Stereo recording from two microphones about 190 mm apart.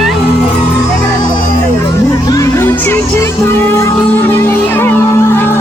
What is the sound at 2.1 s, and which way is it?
Music, 20° left (ahead or behind).